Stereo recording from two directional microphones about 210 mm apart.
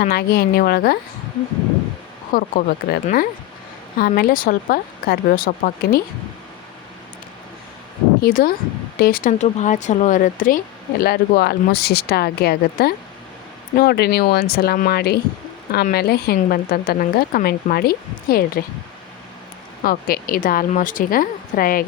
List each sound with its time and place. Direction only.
0.0 s speech: 45° left (ahead or behind)
2.3 s speech: 40° left (ahead or behind)
8.2 s speech: 45° left (ahead or behind)
19.8 s a woman's voice: 40° left (ahead or behind)